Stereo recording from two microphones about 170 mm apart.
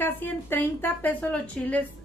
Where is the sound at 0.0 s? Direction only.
10° left (ahead or behind).